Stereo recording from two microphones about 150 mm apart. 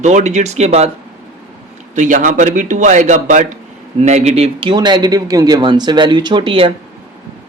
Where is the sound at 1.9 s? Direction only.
55° right (ahead or behind); by 6.7 s 35° right (ahead or behind).